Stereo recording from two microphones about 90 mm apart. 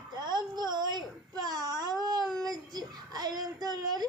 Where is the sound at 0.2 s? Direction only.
50° right (ahead or behind).